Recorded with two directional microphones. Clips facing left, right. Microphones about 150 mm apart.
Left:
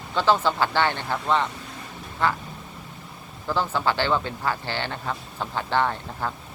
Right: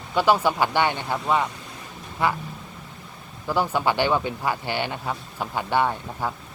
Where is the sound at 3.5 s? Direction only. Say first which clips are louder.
Right 2 dB; 15° right (ahead or behind).